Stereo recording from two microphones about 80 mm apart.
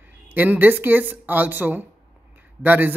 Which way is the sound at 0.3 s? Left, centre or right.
Right.